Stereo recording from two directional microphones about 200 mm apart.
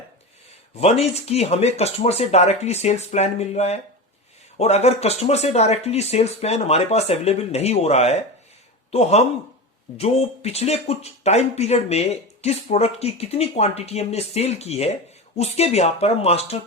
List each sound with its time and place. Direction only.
0.8 s speech: 30° left (ahead or behind)